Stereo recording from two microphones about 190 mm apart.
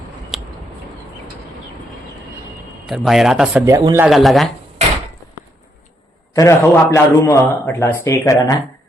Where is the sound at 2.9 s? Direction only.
Centre (ahead or behind).